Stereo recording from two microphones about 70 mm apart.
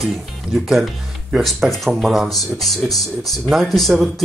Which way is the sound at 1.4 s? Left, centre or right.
Centre.